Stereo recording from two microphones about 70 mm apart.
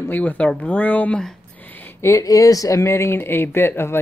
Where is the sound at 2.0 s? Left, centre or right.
Left.